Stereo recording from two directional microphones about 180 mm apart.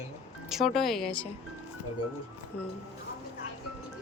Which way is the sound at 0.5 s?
Centre (ahead or behind).